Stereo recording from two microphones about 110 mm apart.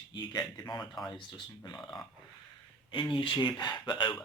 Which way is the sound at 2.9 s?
50° left (ahead or behind).